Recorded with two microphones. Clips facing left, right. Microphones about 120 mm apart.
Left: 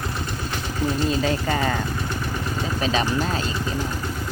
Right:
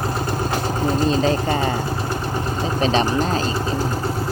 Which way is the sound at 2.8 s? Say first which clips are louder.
Right 4 dB; 35° right (ahead or behind).